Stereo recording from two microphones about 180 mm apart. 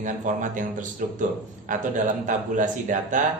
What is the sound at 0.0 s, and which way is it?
A man's voice, 45° right (ahead or behind).